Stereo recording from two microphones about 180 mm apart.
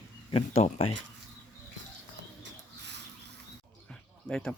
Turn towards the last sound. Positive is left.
turn(degrees=5)  # may be behind; listen again after turning